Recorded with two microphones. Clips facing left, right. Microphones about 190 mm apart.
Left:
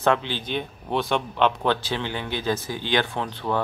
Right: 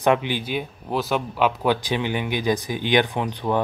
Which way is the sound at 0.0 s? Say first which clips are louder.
Right 2 dB; 15° right (ahead or behind).